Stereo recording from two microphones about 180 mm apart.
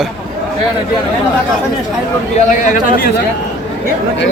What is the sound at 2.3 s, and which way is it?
Speech, 45° left (ahead or behind).